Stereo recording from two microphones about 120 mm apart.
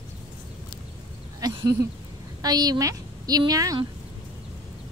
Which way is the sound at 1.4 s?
30° right (ahead or behind).